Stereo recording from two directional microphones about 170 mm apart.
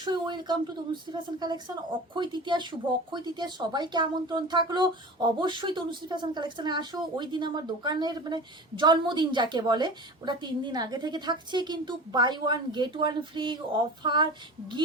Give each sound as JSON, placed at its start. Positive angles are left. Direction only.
{"t": 0.0, "sound": "a woman's voice", "side_deg": -25}